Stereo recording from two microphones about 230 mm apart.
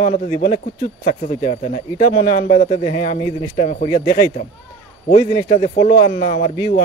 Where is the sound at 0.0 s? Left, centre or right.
Left.